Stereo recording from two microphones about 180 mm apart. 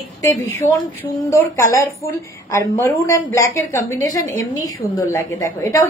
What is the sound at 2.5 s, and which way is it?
A woman's voice, 15° left (ahead or behind).